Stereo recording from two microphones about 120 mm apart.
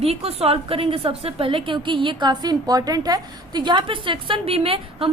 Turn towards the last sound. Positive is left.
turn(degrees=-50)  # may be behind; listen again after turning